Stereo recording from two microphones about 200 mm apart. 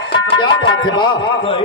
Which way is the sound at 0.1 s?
25° left (ahead or behind).